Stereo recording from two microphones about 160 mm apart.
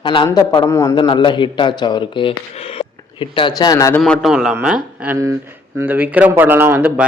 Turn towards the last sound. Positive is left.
turn(degrees=-10)  # may be behind; listen again after turning